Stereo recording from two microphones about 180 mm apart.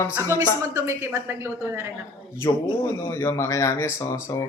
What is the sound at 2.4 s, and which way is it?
Speech, 20° left (ahead or behind).